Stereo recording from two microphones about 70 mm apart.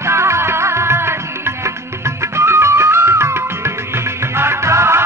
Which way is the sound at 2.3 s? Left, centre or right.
Right.